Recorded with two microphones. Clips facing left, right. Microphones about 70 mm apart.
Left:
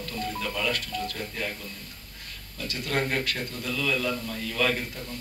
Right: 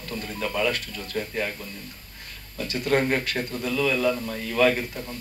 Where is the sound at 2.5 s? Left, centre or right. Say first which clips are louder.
Right 6 dB; right.